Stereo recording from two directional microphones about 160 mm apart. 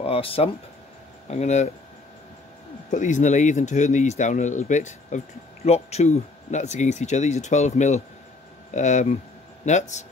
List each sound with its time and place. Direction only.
0.0 s speech: 35° left (ahead or behind)
2.9 s speech: 50° left (ahead or behind)